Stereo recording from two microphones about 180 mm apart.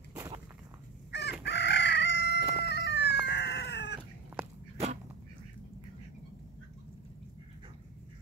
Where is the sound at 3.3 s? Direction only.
75° left (ahead or behind).